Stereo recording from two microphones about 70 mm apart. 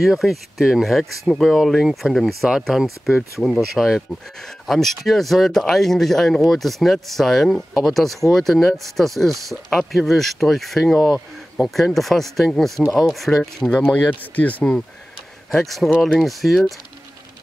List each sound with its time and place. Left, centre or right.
0.0 s speech: centre
13.7 s speech: centre
15.5 s speech: centre